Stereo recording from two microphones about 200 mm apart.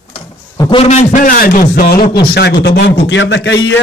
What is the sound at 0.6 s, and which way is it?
A man's voice, 25° left (ahead or behind).